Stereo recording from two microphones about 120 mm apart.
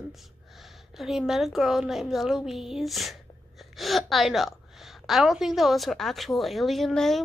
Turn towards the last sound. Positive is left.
turn(degrees=0)  # may be behind; listen again after turning